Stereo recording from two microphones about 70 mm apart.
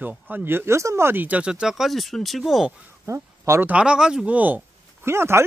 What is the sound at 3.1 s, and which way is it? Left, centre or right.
Speech, right.